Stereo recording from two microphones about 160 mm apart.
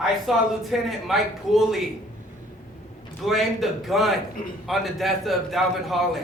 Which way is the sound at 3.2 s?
Centre (ahead or behind).